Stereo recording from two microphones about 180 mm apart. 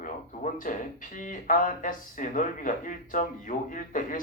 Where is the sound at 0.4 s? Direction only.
45° left (ahead or behind).